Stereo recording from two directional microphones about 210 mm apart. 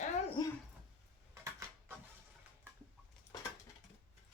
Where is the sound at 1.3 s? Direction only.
10° right (ahead or behind).